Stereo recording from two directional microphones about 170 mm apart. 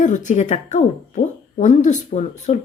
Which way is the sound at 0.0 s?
45° left (ahead or behind).